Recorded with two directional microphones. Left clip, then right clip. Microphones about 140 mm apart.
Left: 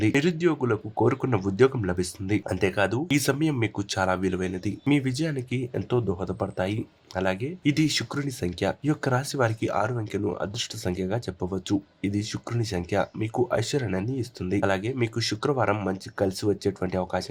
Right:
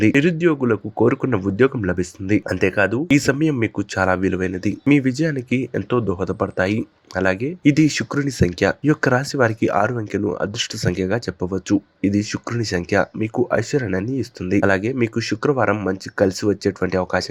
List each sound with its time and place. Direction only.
0.0 s speech: 25° right (ahead or behind)
15.7 s speech: 20° right (ahead or behind)
16.1 s speech: 30° right (ahead or behind)